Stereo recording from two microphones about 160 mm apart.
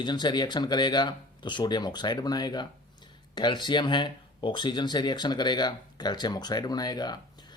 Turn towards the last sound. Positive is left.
turn(degrees=25)  # may be behind; listen again after turning